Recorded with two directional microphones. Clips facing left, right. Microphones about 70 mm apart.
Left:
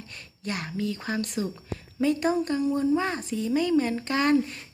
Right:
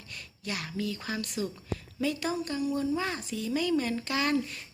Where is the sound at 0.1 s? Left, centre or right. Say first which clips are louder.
Left 3 dB; left.